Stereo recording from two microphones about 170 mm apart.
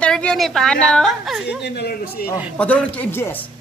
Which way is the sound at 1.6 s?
70° left (ahead or behind).